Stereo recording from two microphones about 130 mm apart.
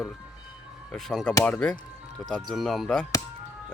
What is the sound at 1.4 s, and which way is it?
Music, 10° left (ahead or behind).